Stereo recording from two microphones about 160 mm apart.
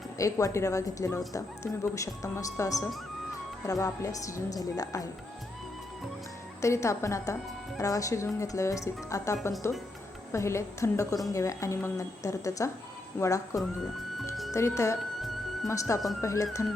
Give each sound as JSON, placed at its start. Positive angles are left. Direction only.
{"t": 0.2, "sound": "a woman's voice", "side_deg": 20}
{"t": 6.6, "sound": "a woman's voice", "side_deg": 20}
{"t": 14.2, "sound": "music", "side_deg": 0}
{"t": 14.5, "sound": "a woman's voice", "side_deg": 20}